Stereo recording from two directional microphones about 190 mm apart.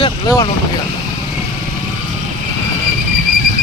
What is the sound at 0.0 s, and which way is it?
Speech, 25° left (ahead or behind).